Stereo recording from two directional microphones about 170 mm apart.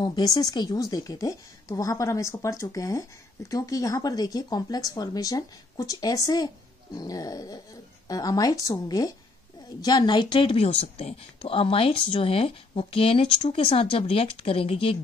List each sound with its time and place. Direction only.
0.0 s a woman's voice: 25° left (ahead or behind)